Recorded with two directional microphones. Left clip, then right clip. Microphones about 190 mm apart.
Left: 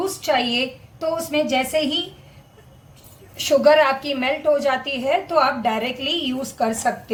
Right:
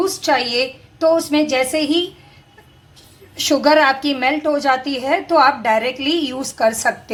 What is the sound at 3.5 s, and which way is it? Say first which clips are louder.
A woman's voice: right 1 dB; 20° right (ahead or behind).